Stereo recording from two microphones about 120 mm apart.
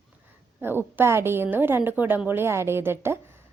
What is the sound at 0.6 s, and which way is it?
A woman's voice, 20° right (ahead or behind).